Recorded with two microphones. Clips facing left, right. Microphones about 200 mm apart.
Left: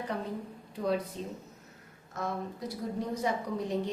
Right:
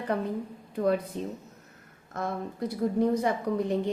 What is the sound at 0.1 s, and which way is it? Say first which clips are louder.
A woman's voice: right 6 dB; 55° right (ahead or behind).